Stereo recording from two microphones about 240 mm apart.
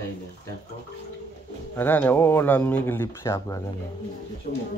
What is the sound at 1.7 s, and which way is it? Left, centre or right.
Speech, centre.